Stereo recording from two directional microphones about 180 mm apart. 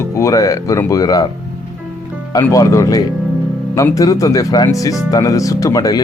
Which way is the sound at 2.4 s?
15° left (ahead or behind).